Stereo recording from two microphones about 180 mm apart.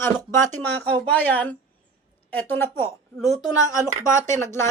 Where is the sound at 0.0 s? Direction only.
15° left (ahead or behind).